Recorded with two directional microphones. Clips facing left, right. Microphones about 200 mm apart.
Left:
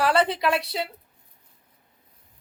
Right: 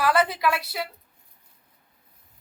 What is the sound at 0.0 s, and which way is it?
Speech, 30° left (ahead or behind).